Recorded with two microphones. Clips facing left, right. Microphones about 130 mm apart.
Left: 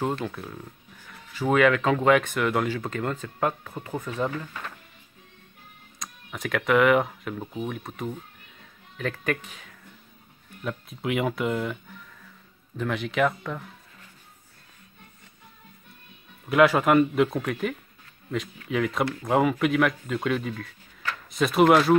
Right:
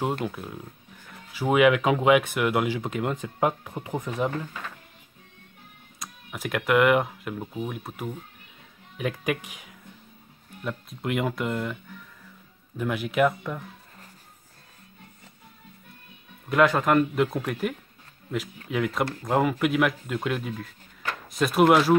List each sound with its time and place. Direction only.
0.2 s speech: 10° right (ahead or behind)
5.9 s speech: 5° right (ahead or behind)
10.6 s speech: centre (ahead or behind)
16.4 s speech: 5° left (ahead or behind)